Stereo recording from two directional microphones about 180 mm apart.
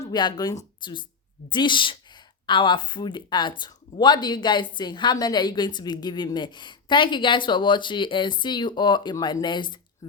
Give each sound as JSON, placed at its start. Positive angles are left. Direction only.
{"t": 0.0, "sound": "a woman's voice", "side_deg": 25}